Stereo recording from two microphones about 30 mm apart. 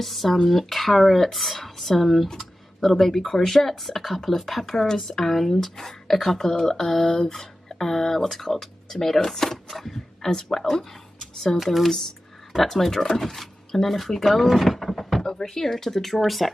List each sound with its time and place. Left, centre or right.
0.0 s speech: centre
7.2 s speech: centre
10.8 s a sound: centre
11.5 s speech: centre
15.2 s speech: centre